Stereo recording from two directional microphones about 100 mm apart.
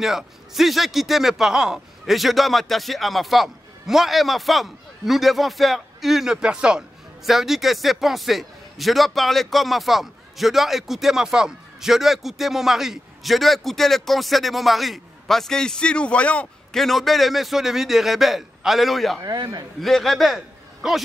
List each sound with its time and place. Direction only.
0.0 s a man's voice: 5° right (ahead or behind)
19.2 s a man's voice: 40° right (ahead or behind)
19.8 s a man's voice: centre (ahead or behind)